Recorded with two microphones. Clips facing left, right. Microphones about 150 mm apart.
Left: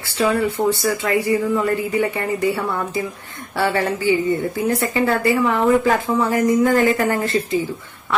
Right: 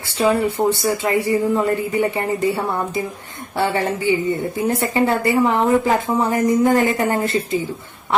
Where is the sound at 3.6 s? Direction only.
20° right (ahead or behind).